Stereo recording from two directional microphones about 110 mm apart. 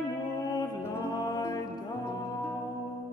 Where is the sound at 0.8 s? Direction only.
35° left (ahead or behind).